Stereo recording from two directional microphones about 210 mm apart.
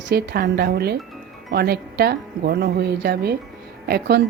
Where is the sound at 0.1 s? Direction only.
50° right (ahead or behind).